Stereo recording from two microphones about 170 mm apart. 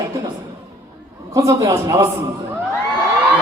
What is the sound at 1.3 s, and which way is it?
Speech, 20° right (ahead or behind).